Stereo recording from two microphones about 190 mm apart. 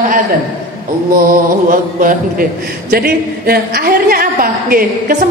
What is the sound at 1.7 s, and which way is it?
A man's voice, 45° right (ahead or behind).